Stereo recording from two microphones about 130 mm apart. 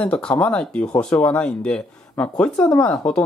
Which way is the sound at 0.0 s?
10° left (ahead or behind).